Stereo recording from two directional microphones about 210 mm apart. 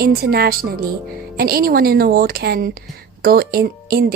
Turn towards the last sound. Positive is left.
turn(degrees=-45)  # may be behind; listen again after turning